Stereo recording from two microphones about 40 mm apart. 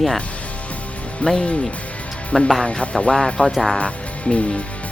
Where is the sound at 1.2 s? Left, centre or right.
Centre; by 2.9 s left.